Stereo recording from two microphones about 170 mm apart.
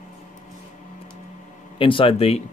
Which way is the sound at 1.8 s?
30° left (ahead or behind).